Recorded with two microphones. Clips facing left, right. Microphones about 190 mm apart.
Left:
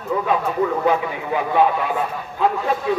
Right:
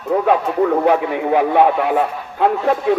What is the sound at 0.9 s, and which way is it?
A man's voice, 65° right (ahead or behind).